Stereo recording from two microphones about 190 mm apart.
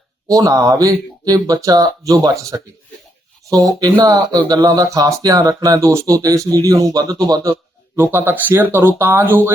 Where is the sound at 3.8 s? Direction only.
20° right (ahead or behind).